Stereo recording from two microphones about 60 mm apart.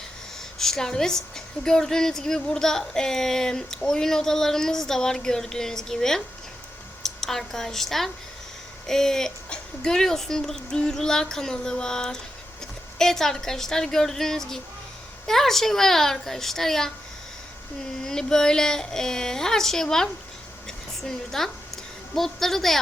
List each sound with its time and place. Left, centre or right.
0.6 s a woman's voice: centre
18.0 s speech: centre
20.7 s a sound: centre
22.1 s a woman's voice: centre